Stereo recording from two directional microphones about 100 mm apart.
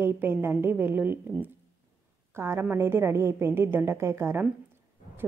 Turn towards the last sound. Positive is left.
turn(degrees=-25)  # may be behind; listen again after turning